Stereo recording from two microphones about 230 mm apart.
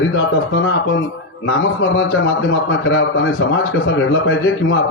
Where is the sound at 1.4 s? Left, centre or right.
Left.